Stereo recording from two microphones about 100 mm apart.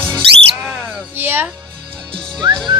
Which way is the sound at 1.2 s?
20° right (ahead or behind).